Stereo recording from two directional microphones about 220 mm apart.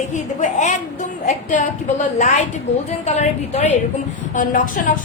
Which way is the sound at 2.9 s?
30° left (ahead or behind).